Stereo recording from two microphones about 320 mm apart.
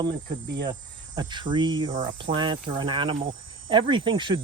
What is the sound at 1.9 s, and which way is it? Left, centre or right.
Speech, right.